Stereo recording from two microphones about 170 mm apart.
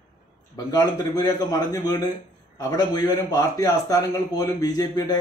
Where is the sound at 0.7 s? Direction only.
25° left (ahead or behind).